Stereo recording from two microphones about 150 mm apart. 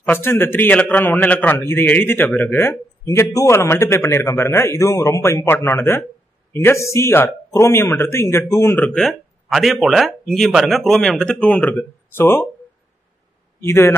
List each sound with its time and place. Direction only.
0.0 s a man's voice: 15° left (ahead or behind)
13.6 s a man's voice: 15° left (ahead or behind)